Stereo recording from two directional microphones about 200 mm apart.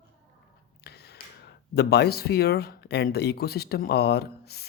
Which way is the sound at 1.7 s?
55° left (ahead or behind).